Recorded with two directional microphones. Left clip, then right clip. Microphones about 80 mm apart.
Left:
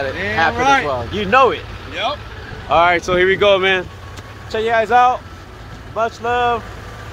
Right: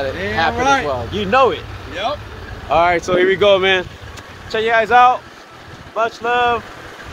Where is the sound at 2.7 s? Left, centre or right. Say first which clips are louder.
Left 1 dB; centre.